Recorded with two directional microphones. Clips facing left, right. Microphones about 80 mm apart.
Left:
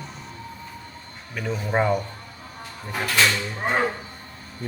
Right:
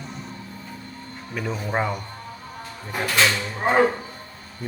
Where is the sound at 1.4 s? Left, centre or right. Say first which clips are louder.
Left 2 dB; centre.